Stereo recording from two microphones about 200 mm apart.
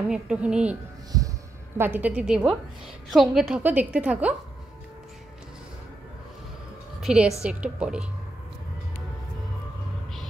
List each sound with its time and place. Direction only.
0.1 s a woman's voice: 5° right (ahead or behind)
1.1 s a woman's voice: 20° right (ahead or behind)
7.0 s a woman's voice: 5° right (ahead or behind)